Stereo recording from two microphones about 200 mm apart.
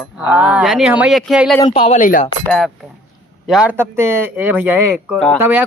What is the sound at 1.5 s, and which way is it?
Speech, 25° left (ahead or behind).